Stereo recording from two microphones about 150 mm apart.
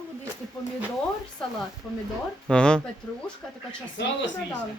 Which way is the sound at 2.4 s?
5° left (ahead or behind).